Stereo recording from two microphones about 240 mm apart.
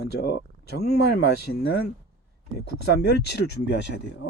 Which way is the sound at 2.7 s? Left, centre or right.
Left.